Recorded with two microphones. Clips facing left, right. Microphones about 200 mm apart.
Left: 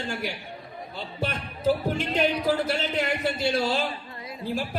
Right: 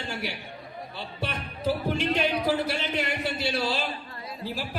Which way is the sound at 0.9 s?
45° left (ahead or behind).